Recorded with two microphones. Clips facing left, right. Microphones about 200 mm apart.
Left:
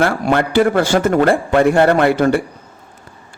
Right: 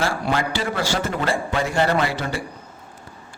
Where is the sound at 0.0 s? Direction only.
60° left (ahead or behind).